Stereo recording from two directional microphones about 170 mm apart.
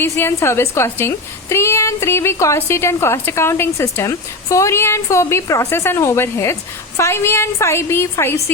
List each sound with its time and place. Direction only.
0.0 s a woman's voice: 15° left (ahead or behind)